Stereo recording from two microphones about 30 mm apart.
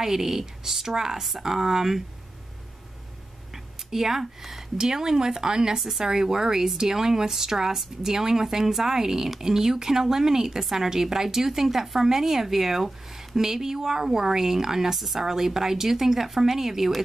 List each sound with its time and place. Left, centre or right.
0.0 s speech: centre
3.5 s speech: centre
4.7 s speech: centre
5.8 s speech: centre